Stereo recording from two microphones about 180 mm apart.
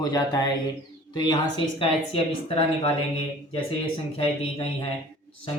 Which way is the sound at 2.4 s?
30° left (ahead or behind).